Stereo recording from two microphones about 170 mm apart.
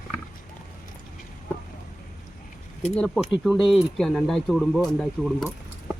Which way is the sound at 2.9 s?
5° left (ahead or behind).